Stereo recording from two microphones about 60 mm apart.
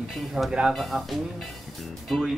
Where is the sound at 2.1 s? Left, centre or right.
Centre.